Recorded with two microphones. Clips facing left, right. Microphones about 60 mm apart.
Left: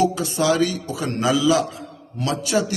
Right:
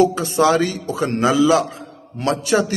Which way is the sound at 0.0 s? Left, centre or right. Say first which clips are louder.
Right 5 dB; right.